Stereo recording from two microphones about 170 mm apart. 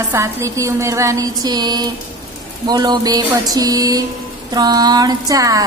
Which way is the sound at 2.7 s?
25° right (ahead or behind).